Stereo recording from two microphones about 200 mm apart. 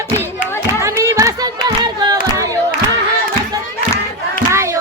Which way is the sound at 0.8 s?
15° right (ahead or behind).